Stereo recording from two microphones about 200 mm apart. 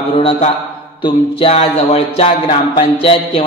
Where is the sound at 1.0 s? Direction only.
30° left (ahead or behind).